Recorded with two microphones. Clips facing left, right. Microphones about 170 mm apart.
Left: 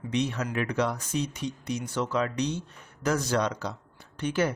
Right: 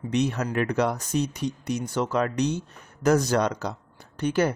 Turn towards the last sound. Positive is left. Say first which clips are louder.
# right 4 dB
turn(degrees=-40)  # may be behind; listen again after turning